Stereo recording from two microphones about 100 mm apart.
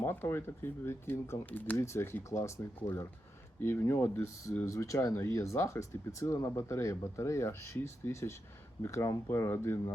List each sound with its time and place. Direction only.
0.0 s speech: 25° left (ahead or behind)